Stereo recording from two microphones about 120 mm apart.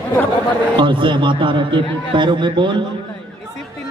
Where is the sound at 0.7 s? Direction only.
40° right (ahead or behind).